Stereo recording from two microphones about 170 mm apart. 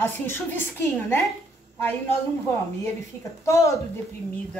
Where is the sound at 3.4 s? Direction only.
15° left (ahead or behind).